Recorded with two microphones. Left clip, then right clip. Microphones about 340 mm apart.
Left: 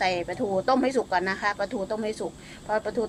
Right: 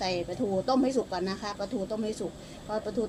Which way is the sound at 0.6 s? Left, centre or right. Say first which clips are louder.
Left 4 dB; left.